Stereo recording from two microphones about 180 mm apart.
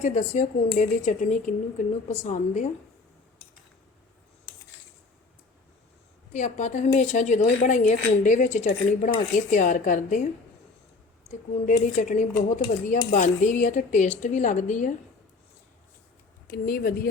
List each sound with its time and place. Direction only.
0.0 s a woman's voice: 40° left (ahead or behind)
6.3 s a woman's voice: 45° left (ahead or behind)
11.3 s speech: 45° left (ahead or behind)
16.5 s speech: 55° left (ahead or behind)